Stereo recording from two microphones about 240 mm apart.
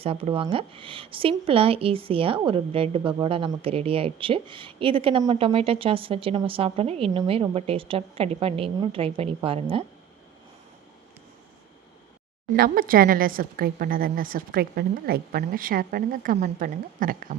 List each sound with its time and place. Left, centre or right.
0.0 s speech: right
12.5 s a woman's voice: right